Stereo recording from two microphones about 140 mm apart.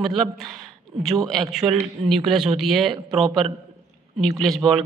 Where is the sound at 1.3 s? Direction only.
Centre (ahead or behind).